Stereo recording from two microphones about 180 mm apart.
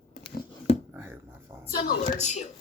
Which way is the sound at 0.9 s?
10° right (ahead or behind).